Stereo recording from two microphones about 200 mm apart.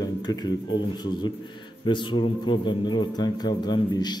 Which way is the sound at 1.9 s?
25° left (ahead or behind).